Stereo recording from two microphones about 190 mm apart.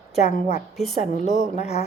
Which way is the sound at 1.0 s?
40° left (ahead or behind).